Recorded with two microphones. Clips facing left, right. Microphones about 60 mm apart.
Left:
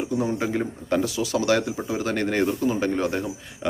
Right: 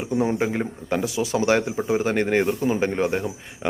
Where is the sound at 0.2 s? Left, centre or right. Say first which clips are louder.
Right 5 dB; right.